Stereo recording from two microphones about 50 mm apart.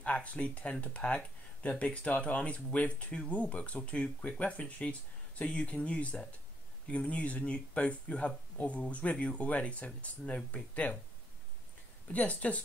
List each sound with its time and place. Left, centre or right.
0.0 s speech: left
12.1 s speech: left